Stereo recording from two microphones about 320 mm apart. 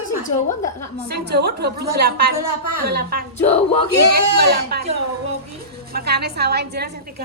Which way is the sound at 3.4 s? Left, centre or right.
Centre.